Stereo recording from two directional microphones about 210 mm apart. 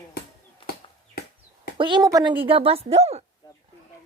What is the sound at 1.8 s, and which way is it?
A woman's voice, 20° right (ahead or behind).